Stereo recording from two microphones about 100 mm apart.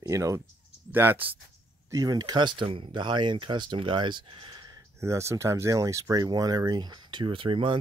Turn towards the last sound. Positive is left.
turn(degrees=-60)  # may be behind; listen again after turning